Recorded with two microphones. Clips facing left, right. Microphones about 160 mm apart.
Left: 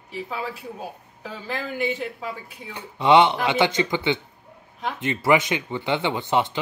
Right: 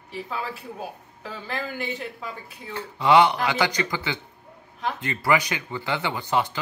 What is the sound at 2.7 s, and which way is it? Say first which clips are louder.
Speech: left 1 dB; 20° left (ahead or behind).